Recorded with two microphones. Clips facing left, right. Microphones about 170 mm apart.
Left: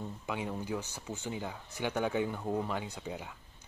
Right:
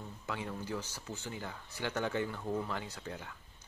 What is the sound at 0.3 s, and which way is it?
Speech, 15° left (ahead or behind).